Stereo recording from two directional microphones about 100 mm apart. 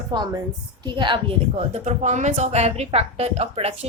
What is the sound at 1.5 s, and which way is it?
A woman's voice, 90° right.